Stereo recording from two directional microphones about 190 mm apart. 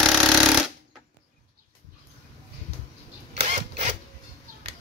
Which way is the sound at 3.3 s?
35° right (ahead or behind).